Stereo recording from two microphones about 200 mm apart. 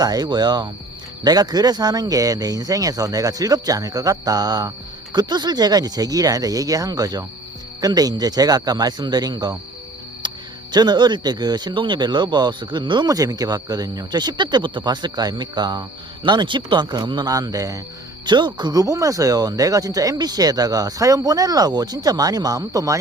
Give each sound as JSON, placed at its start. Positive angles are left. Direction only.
{"t": 0.0, "sound": "speech", "side_deg": -20}